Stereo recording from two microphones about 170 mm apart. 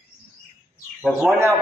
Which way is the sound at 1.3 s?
15° right (ahead or behind).